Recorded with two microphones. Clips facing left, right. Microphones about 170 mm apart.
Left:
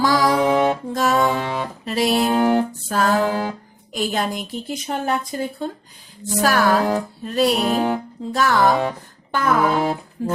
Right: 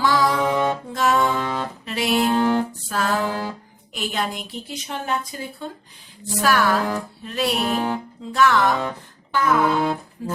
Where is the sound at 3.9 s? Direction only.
40° left (ahead or behind).